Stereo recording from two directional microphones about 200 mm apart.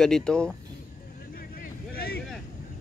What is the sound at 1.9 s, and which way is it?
Vehicle, 50° left (ahead or behind).